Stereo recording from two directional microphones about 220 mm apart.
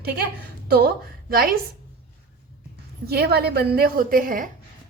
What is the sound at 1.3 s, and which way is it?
Speech, 45° right (ahead or behind).